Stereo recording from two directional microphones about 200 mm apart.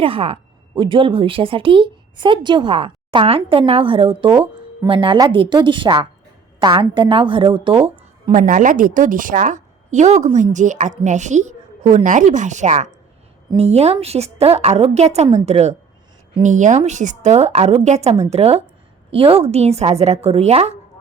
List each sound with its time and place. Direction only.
0.0 s speech: 30° right (ahead or behind)
8.3 s a woman's voice: 40° right (ahead or behind)